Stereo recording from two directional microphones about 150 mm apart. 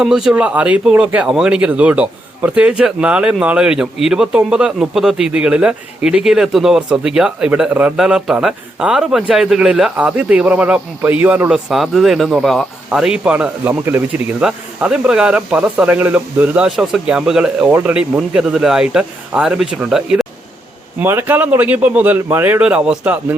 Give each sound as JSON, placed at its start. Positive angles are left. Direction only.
{"t": 0.0, "sound": "speech", "side_deg": -5}
{"t": 21.0, "sound": "speech", "side_deg": -15}